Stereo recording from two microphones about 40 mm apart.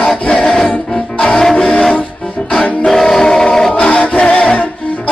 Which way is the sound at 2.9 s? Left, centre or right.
Centre.